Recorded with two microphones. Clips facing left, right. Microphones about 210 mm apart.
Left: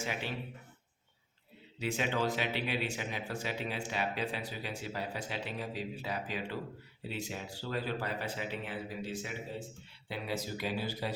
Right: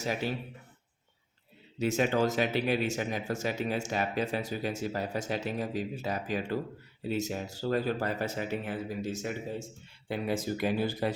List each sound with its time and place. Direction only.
0.0 s speech: 40° right (ahead or behind)
1.8 s speech: 45° right (ahead or behind)